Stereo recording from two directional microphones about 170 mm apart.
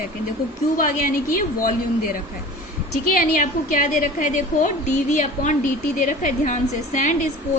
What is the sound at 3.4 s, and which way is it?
A woman's voice, 50° left (ahead or behind).